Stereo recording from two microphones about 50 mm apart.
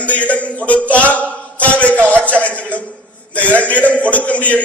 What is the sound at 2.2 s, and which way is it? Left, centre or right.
A man's voice, left.